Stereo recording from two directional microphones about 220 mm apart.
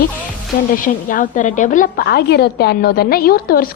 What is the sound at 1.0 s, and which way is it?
A woman's voice, 35° left (ahead or behind).